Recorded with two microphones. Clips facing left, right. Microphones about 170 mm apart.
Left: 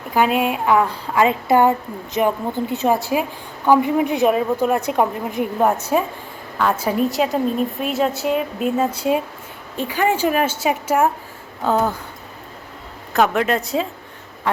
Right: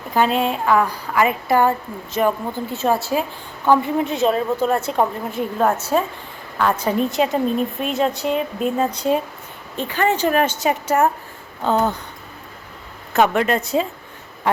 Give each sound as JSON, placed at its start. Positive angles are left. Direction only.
{"t": 0.1, "sound": "a woman's voice", "side_deg": 10}
{"t": 13.1, "sound": "a woman's voice", "side_deg": 0}